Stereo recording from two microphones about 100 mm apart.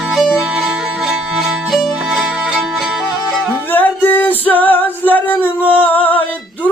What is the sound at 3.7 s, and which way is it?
Music, 20° left (ahead or behind).